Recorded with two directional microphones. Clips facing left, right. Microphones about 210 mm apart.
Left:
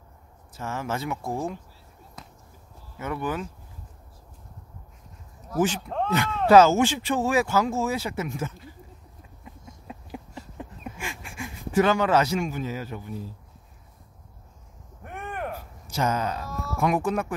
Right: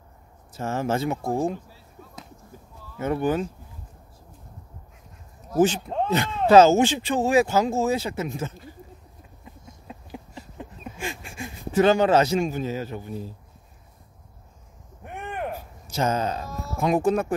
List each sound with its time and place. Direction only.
0.5 s speech: 30° right (ahead or behind)
3.0 s speech: 30° right (ahead or behind)
5.5 s speech: 25° right (ahead or behind)
11.0 s speech: 25° right (ahead or behind)
15.3 s a sound: 20° right (ahead or behind)